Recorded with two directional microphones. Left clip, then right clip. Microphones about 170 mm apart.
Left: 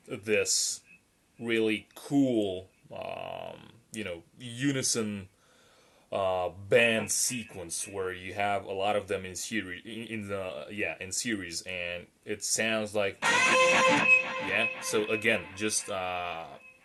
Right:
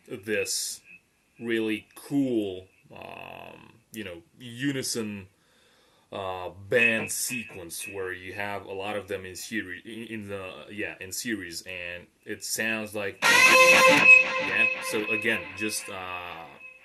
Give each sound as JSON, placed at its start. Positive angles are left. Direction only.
{"t": 0.1, "sound": "speech", "side_deg": 15}
{"t": 13.1, "sound": "speech", "side_deg": -40}
{"t": 14.9, "sound": "speech", "side_deg": 15}